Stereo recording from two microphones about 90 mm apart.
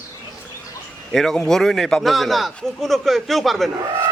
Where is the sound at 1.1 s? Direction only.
5° left (ahead or behind).